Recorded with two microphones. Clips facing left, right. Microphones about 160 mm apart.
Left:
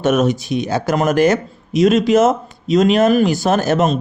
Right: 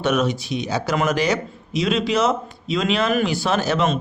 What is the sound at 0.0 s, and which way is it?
Speech, 45° left (ahead or behind).